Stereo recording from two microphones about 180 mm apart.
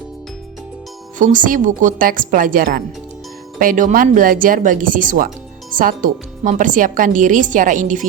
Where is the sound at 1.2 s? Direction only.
45° right (ahead or behind).